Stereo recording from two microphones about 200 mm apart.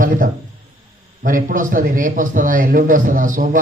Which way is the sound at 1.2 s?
45° right (ahead or behind).